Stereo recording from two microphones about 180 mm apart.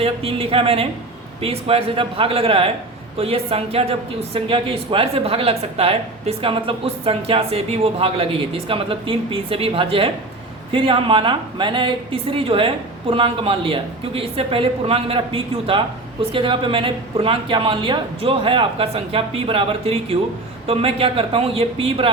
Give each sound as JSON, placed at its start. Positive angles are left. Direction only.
{"t": 0.0, "sound": "speech", "side_deg": -30}